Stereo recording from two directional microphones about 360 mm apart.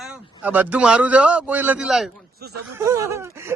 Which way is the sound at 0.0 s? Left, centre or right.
Centre.